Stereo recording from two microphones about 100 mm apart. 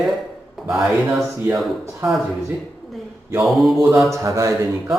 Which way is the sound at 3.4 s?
Centre (ahead or behind).